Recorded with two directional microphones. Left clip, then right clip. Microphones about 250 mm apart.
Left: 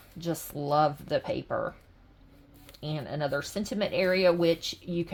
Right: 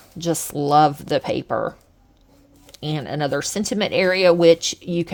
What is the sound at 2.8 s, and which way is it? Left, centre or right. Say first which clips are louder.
Speech: right 8 dB; right.